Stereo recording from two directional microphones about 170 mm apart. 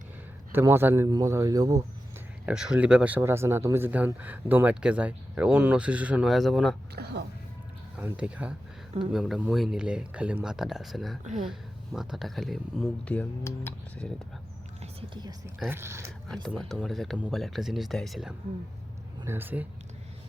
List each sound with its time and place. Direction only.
0.5 s a man's voice: 15° right (ahead or behind)
2.5 s speech: 5° right (ahead or behind)
6.9 s speech: 75° right (ahead or behind)
7.9 s speech: 5° right (ahead or behind)
13.1 s speech: 10° left (ahead or behind)
14.8 s speech: 25° right (ahead or behind)
16.3 s speech: 5° left (ahead or behind)
19.2 s speech: 15° right (ahead or behind)